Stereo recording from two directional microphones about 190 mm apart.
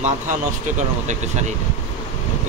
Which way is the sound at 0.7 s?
40° right (ahead or behind).